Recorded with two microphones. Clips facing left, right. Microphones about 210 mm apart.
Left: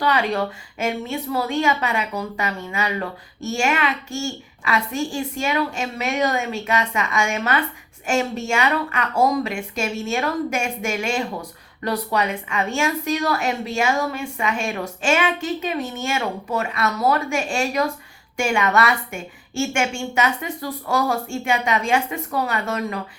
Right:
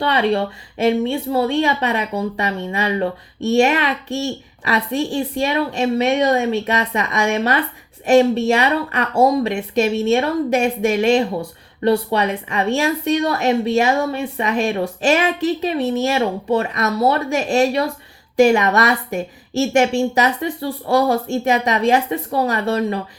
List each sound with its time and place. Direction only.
0.0 s a woman's voice: 30° right (ahead or behind)